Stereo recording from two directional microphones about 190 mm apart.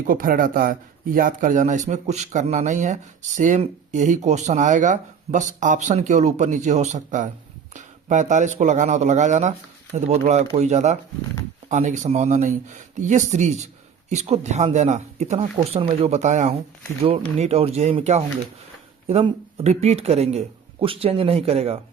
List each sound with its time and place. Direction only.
0.0 s speech: 45° right (ahead or behind); by 21.8 s 30° right (ahead or behind)